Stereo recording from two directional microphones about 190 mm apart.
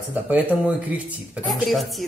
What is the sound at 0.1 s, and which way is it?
A woman's voice, 10° right (ahead or behind).